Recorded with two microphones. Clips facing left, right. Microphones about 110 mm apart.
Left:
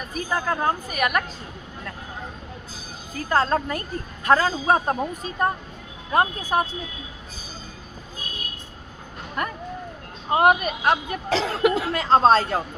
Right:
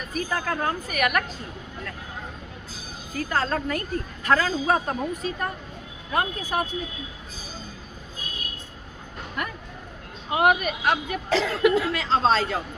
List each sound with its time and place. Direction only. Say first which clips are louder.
0.2 s speech: left 2 dB; 20° left (ahead or behind)
3.2 s speech: left 5 dB; 35° left (ahead or behind)
9.4 s speech: left 5 dB; 35° left (ahead or behind)
11.3 s speech: even; 30° left (ahead or behind)
11.9 s speech: left 5 dB; 45° left (ahead or behind)